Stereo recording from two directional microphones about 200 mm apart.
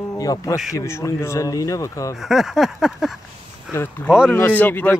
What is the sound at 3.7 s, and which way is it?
Speech, 10° left (ahead or behind).